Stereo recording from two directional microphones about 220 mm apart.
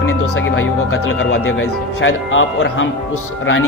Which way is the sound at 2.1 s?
65° left (ahead or behind).